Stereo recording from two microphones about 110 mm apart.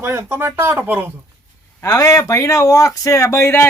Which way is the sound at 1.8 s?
30° left (ahead or behind).